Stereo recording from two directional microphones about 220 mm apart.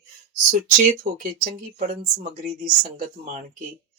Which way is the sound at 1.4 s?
40° right (ahead or behind).